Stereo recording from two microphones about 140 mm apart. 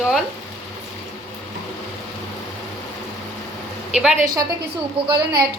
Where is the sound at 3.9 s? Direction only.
5° right (ahead or behind).